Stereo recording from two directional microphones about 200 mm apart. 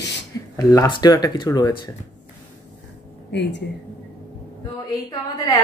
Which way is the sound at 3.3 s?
60° left (ahead or behind).